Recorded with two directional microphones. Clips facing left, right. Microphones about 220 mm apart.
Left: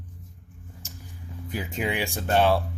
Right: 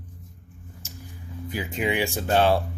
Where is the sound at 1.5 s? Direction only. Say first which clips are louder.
Right 2 dB; centre (ahead or behind).